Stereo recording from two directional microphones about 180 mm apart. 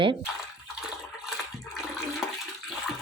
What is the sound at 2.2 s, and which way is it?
Toilet flush, centre (ahead or behind).